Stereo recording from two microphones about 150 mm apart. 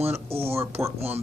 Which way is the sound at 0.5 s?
20° right (ahead or behind).